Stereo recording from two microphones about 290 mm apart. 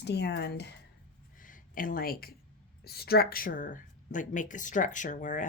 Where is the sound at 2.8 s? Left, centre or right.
Left.